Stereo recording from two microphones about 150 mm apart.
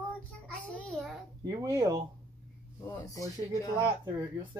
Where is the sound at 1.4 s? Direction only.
25° right (ahead or behind).